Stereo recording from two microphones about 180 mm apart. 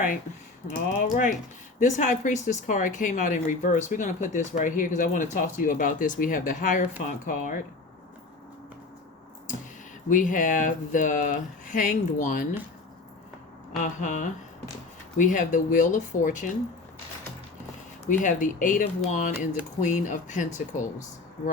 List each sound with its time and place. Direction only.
0.7 s speech: 45° left (ahead or behind)
10.1 s speech: 45° left (ahead or behind)
13.7 s speech: 45° left (ahead or behind)
18.1 s speech: 45° left (ahead or behind)